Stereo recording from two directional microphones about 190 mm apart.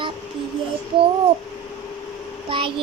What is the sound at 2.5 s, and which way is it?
Speech, 25° right (ahead or behind).